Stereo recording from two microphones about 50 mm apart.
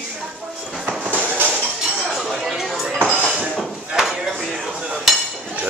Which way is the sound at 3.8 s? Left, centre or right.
Centre.